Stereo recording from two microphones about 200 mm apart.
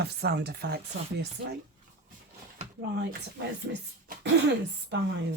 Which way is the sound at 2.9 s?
60° right (ahead or behind).